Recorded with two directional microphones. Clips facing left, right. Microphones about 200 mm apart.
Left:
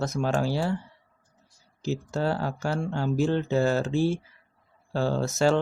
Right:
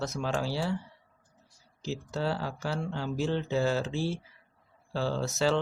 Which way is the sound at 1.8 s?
50° left (ahead or behind).